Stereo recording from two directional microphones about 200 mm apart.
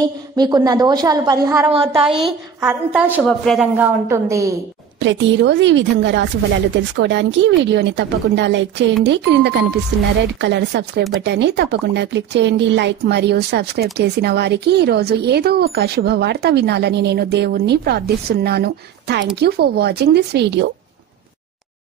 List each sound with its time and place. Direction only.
0.4 s a woman's voice: 20° right (ahead or behind)
2.0 s a woman's voice: centre (ahead or behind)
3.3 s a woman's voice: 5° left (ahead or behind)
3.7 s a woman's voice: 10° right (ahead or behind)
5.0 s speech: 65° right (ahead or behind)